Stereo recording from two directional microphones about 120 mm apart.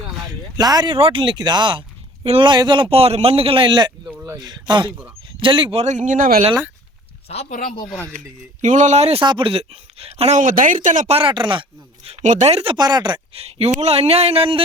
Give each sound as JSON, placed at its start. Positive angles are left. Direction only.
{"t": 0.5, "sound": "speech", "side_deg": -35}
{"t": 0.9, "sound": "a man's voice", "side_deg": -45}
{"t": 2.2, "sound": "speech", "side_deg": -55}
{"t": 2.5, "sound": "a man's voice", "side_deg": -40}
{"t": 4.0, "sound": "a sound", "side_deg": -5}
{"t": 4.4, "sound": "speech", "side_deg": -35}
{"t": 5.7, "sound": "speech", "side_deg": -70}
{"t": 7.3, "sound": "speech", "side_deg": 75}
{"t": 8.6, "sound": "speech", "side_deg": -90}
{"t": 9.2, "sound": "speech", "side_deg": -45}
{"t": 11.2, "sound": "a man's voice", "side_deg": -45}
{"t": 12.2, "sound": "speech", "side_deg": -80}
{"t": 12.7, "sound": "speech", "side_deg": -35}
{"t": 13.3, "sound": "speech", "side_deg": -60}